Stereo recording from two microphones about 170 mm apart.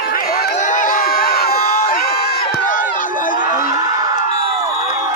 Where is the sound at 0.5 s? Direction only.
50° left (ahead or behind).